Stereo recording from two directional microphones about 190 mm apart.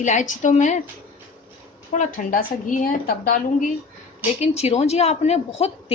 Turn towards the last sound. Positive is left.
turn(degrees=35)  # may be behind; listen again after turning